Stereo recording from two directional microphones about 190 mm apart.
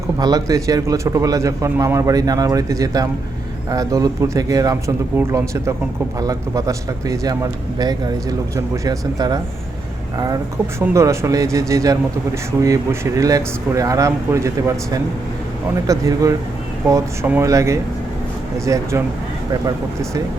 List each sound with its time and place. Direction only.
0.2 s a man's voice: 20° right (ahead or behind)